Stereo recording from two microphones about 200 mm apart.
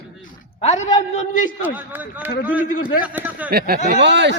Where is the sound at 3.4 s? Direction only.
50° right (ahead or behind).